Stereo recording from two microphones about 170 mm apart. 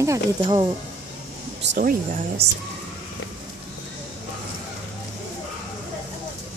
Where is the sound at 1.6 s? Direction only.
75° right (ahead or behind); by 2.4 s 60° right (ahead or behind).